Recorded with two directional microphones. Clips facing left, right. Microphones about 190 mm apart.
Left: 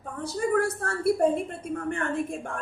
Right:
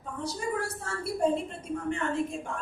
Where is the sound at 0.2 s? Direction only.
55° left (ahead or behind).